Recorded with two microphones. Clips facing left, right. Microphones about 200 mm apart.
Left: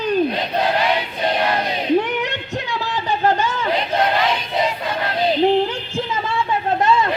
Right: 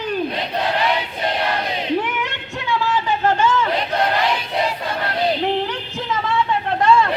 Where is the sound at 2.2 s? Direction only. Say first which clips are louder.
Even; 40° left (ahead or behind).